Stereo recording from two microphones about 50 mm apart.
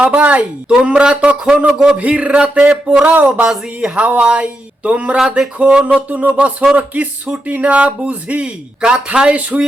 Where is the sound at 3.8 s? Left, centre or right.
Right.